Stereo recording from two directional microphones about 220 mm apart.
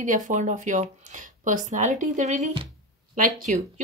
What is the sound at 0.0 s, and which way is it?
Speech, 35° right (ahead or behind).